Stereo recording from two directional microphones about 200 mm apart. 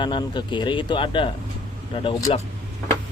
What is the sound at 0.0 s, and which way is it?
Speech, 20° left (ahead or behind).